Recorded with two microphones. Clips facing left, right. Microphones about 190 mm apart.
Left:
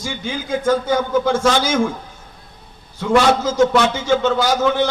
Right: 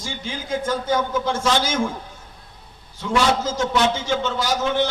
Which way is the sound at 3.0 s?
65° left (ahead or behind).